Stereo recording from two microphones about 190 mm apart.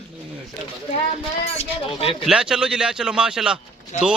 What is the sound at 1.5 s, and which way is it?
Speech, 30° left (ahead or behind).